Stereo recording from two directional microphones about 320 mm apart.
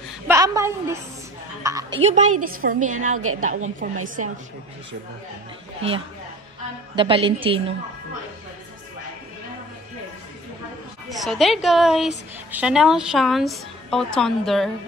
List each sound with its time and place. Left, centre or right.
0.3 s a woman's voice: centre
3.2 s a woman's voice: right
3.8 s a woman's voice: right
5.8 s a woman's voice: centre
11.1 s a woman's voice: centre